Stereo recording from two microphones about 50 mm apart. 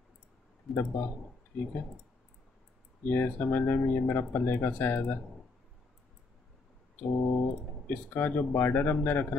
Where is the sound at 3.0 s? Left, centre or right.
Left.